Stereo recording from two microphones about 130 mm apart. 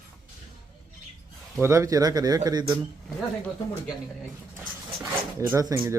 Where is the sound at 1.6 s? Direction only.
20° right (ahead or behind).